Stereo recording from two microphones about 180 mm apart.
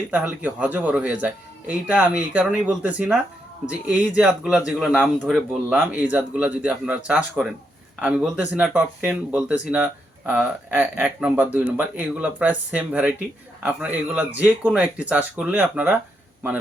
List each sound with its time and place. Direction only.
0.1 s speech: 10° right (ahead or behind)